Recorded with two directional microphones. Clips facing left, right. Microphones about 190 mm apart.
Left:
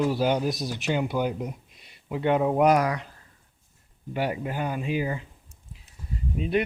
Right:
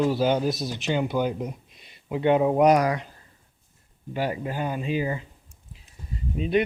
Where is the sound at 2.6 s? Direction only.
35° right (ahead or behind).